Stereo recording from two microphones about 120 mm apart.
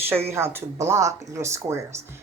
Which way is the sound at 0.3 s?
20° right (ahead or behind).